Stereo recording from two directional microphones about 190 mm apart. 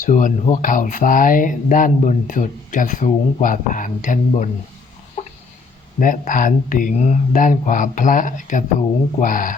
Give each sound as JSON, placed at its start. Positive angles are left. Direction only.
{"t": 0.0, "sound": "speech", "side_deg": 45}
{"t": 6.0, "sound": "speech", "side_deg": 45}